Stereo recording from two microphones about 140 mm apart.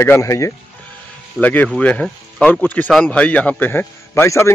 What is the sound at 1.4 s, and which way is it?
A man's voice, 10° left (ahead or behind).